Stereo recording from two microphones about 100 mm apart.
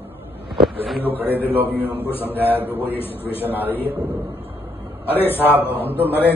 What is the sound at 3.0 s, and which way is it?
Speech, 20° left (ahead or behind).